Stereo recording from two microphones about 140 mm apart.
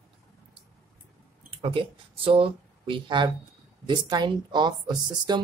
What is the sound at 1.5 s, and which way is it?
Speech, 40° right (ahead or behind).